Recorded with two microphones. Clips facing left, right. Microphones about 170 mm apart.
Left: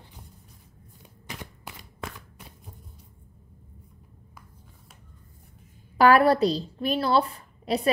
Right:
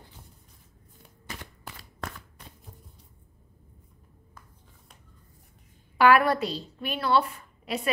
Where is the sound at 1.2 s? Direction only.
10° left (ahead or behind).